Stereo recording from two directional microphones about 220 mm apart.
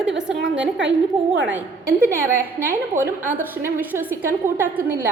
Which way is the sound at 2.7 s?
10° right (ahead or behind).